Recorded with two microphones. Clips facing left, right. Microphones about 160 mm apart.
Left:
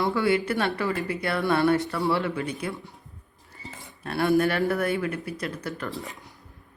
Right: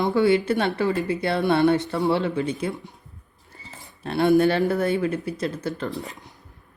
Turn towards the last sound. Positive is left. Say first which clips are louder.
# right 5 dB
turn(degrees=-25)  # may be behind; listen again after turning